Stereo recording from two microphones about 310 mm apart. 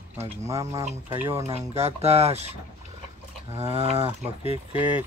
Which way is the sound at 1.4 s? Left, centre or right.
Centre.